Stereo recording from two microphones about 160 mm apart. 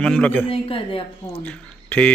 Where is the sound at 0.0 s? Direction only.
5° left (ahead or behind).